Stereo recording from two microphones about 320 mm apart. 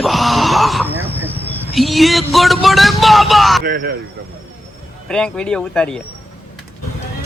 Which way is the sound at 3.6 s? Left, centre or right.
Right.